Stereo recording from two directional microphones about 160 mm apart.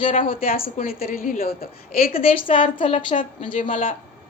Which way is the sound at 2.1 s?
35° left (ahead or behind).